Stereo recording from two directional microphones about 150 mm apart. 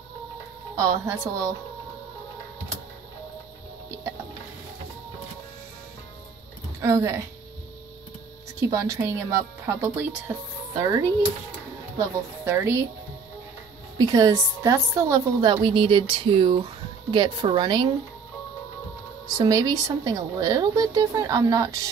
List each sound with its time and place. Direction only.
0.7 s a woman's voice: 20° right (ahead or behind)
6.8 s a woman's voice: 20° right (ahead or behind)
8.5 s a woman's voice: 25° right (ahead or behind)
12.0 s a woman's voice: 20° right (ahead or behind)
13.9 s a woman's voice: 25° right (ahead or behind)
19.2 s a woman's voice: 25° right (ahead or behind)